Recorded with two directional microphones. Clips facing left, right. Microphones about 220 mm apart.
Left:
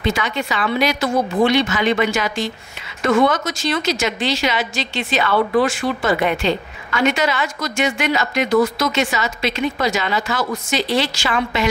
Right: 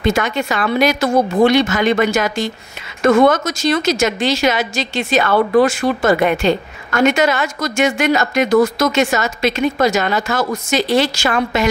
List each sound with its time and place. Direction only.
0.0 s a woman's voice: 45° right (ahead or behind)